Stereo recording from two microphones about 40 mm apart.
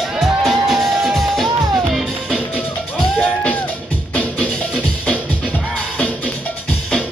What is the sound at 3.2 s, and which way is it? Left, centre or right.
Music, left.